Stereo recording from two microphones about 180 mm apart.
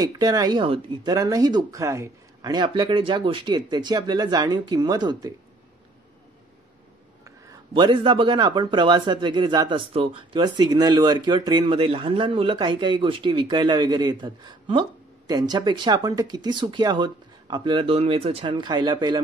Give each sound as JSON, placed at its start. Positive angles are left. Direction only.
{"t": 0.0, "sound": "a man's voice", "side_deg": -20}
{"t": 7.2, "sound": "a man's voice", "side_deg": -20}